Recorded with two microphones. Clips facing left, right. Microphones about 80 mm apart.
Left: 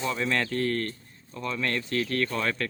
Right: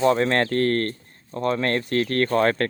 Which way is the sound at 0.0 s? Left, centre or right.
Right.